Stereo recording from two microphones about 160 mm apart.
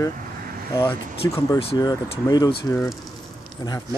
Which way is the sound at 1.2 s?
20° left (ahead or behind).